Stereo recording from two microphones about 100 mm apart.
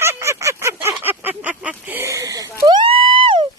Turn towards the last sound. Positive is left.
turn(degrees=-60)  # may be behind; listen again after turning